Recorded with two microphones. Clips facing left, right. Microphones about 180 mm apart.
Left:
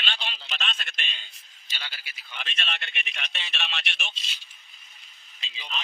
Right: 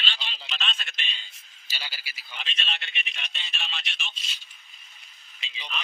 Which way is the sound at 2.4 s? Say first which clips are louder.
Left 1 dB; 55° left (ahead or behind).